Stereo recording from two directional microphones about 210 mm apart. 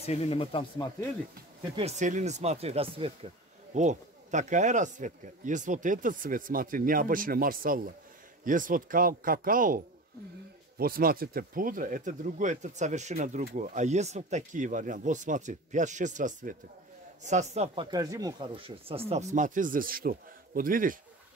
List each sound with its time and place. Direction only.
0.0 s speech: 30° left (ahead or behind)
1.8 s a man's voice: 35° right (ahead or behind)
10.8 s a man's voice: 45° right (ahead or behind)